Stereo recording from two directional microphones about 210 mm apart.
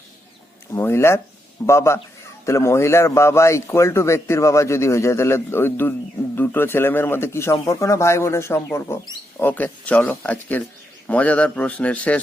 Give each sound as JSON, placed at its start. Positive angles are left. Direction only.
{"t": 0.7, "sound": "speech", "side_deg": 10}